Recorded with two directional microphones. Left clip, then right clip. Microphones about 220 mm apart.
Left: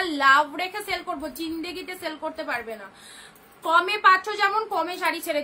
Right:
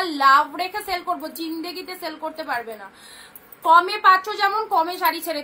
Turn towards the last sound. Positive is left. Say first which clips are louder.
# right 3 dB
turn(degrees=15)  # may be behind; listen again after turning